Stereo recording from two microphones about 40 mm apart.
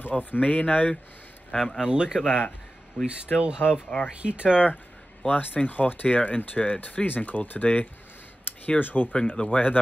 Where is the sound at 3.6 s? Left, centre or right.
Left.